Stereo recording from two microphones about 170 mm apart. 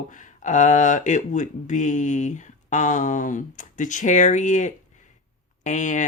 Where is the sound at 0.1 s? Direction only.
45° left (ahead or behind).